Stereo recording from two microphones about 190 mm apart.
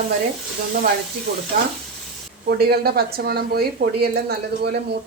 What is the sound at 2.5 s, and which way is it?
Speech, 55° right (ahead or behind).